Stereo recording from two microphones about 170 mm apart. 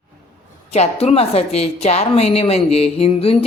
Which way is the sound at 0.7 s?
40° left (ahead or behind).